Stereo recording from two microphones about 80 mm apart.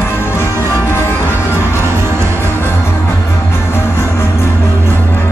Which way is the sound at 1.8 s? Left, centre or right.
Right.